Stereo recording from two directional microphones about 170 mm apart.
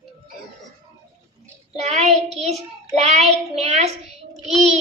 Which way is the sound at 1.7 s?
40° right (ahead or behind).